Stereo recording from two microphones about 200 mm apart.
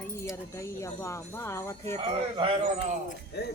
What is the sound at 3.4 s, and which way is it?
Speech, 55° left (ahead or behind).